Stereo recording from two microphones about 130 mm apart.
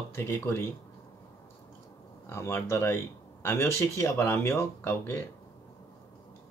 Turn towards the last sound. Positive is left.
turn(degrees=20)  # may be behind; listen again after turning